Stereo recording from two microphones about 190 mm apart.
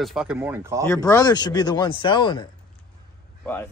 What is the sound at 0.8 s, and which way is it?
Speech, 15° left (ahead or behind).